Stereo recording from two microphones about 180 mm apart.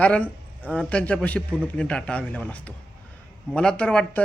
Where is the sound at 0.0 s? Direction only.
5° left (ahead or behind).